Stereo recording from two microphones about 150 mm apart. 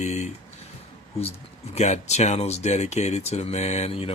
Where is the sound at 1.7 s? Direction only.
50° left (ahead or behind).